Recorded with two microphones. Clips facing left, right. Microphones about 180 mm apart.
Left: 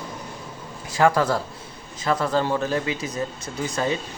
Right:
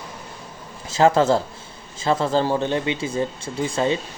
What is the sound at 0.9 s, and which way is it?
Speech, 25° right (ahead or behind).